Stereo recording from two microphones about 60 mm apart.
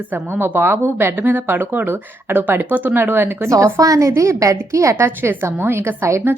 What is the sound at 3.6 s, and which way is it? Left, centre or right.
A woman's voice, right.